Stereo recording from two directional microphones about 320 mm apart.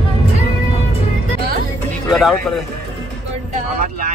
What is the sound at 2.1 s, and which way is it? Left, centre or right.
Speech, centre.